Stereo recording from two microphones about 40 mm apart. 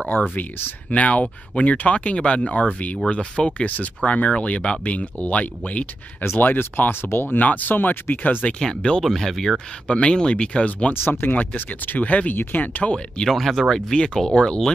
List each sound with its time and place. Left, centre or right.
0.3 s speech: left
0.8 s speech: left
6.3 s speech: left
6.9 s speech: left
7.3 s speech: left
7.7 s speech: left
8.5 s speech: centre
9.0 s speech: centre
9.9 s speech: left
10.9 s speech: left
11.5 s speech: left
12.1 s speech: left
12.4 s speech: left
13.3 s speech: centre; by 14.6 s left